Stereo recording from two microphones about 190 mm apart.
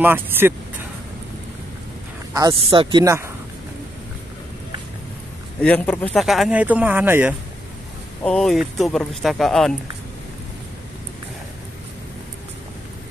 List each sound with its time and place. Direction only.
0.0 s speech: 10° right (ahead or behind)
2.3 s speech: 25° right (ahead or behind)
5.6 s speech: 5° left (ahead or behind)
8.2 s speech: 5° left (ahead or behind)